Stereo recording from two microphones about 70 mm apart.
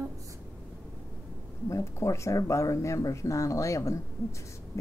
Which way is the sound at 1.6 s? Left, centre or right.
Left.